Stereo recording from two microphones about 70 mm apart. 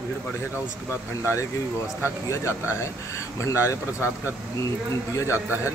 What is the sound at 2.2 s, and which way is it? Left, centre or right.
Speech, left.